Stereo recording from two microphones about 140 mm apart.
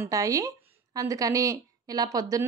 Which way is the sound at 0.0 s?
25° right (ahead or behind).